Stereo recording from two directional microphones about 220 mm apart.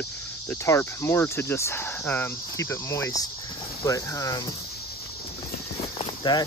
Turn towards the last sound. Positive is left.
turn(degrees=20)  # may be behind; listen again after turning